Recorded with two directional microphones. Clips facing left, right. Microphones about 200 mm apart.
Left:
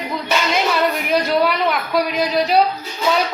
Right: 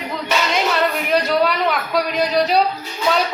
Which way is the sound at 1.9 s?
Centre (ahead or behind).